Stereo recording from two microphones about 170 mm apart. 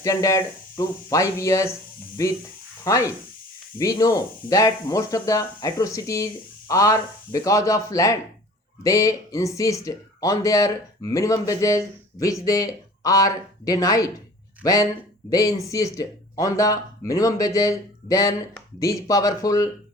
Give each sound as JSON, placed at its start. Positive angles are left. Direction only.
{"t": 0.0, "sound": "a man's voice", "side_deg": 20}